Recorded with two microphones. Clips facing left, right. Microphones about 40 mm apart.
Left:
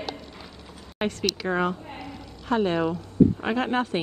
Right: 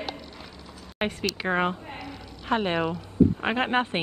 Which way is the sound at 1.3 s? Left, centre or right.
Right.